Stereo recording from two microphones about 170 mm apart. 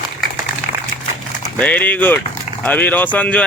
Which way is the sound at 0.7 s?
45° left (ahead or behind).